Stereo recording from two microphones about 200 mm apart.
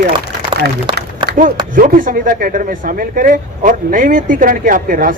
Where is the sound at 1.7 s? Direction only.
45° right (ahead or behind).